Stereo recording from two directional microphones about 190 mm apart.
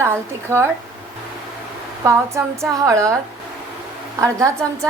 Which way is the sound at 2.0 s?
15° right (ahead or behind).